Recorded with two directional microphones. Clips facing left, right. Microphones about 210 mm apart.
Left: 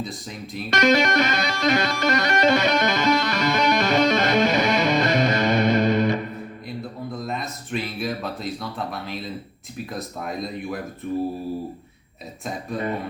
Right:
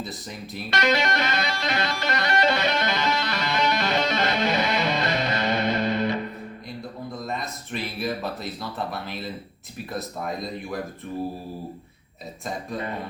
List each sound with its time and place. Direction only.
0.7 s music: 45° left (ahead or behind)
7.1 s a sound: centre (ahead or behind)
8.9 s speech: centre (ahead or behind)